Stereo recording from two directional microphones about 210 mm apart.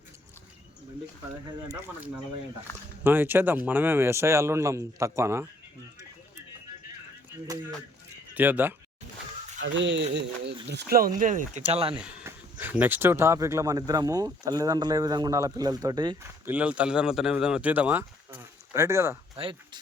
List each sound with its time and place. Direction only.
3.0 s speech: 10° right (ahead or behind)
8.4 s speech: 10° right (ahead or behind)
9.6 s speech: 60° right (ahead or behind); by 11.6 s 40° right (ahead or behind)
11.7 s speech: 25° right (ahead or behind)
11.9 s speech: 5° right (ahead or behind)
16.5 s speech: 5° right (ahead or behind)
19.4 s speech: 25° right (ahead or behind)